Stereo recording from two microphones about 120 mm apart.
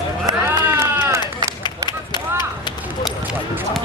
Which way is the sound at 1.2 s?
35° left (ahead or behind).